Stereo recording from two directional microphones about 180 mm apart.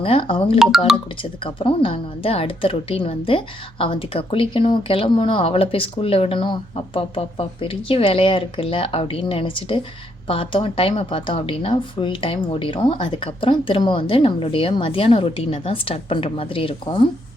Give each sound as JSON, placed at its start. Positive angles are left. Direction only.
{"t": 0.0, "sound": "a woman's voice", "side_deg": 30}